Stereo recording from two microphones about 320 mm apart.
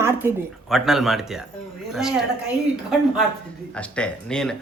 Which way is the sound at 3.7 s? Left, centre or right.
Centre.